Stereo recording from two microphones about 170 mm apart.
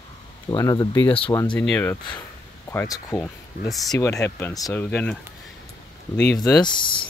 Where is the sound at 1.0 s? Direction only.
30° left (ahead or behind).